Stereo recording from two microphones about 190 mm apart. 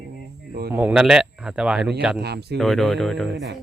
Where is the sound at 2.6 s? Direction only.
Centre (ahead or behind).